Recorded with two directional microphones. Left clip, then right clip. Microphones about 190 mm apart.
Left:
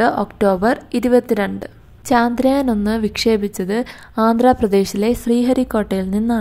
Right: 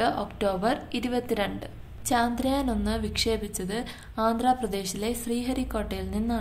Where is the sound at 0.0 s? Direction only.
40° left (ahead or behind).